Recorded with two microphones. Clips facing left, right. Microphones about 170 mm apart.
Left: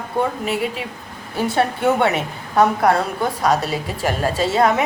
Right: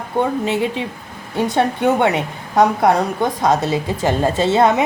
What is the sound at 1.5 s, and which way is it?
A woman's voice, 15° right (ahead or behind).